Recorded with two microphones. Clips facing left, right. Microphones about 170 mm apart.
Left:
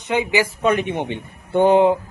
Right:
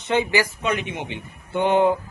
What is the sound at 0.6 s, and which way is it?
Speech, 50° left (ahead or behind).